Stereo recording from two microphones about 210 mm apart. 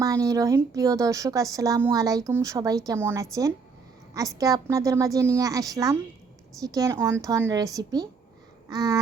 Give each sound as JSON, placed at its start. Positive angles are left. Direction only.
{"t": 0.0, "sound": "speech", "side_deg": -15}